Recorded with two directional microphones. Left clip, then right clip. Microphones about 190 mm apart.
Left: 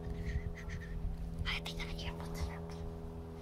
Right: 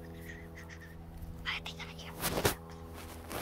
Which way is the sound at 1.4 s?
15° left (ahead or behind).